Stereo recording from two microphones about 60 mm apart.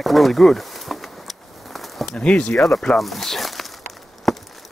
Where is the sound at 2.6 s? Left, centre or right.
Centre.